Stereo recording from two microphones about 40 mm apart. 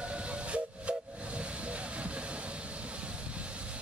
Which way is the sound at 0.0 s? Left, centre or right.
Right.